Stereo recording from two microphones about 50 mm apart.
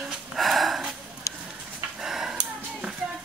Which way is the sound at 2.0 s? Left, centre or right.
Centre.